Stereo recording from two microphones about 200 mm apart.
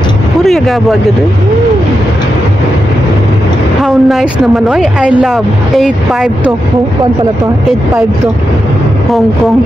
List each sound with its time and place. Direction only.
0.4 s speech: centre (ahead or behind)
3.8 s speech: centre (ahead or behind)